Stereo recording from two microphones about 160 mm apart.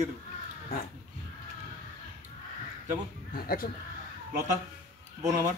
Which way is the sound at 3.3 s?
65° left (ahead or behind).